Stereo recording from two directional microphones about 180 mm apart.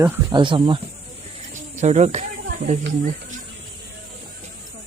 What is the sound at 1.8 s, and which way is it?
Speech, 40° right (ahead or behind).